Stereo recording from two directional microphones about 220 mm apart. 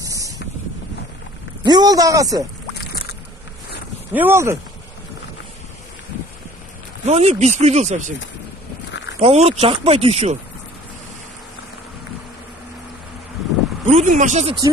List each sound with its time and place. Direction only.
0.0 s vehicle: 15° right (ahead or behind)
1.6 s speech: 20° right (ahead or behind)
4.1 s speech: 10° right (ahead or behind)
7.1 s speech: 30° right (ahead or behind)
9.2 s speech: 30° right (ahead or behind)
13.8 s speech: 35° right (ahead or behind)